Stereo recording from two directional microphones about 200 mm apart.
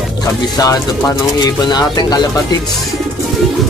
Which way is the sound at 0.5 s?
15° left (ahead or behind).